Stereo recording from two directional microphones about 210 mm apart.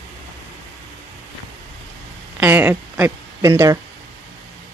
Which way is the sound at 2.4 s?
10° right (ahead or behind).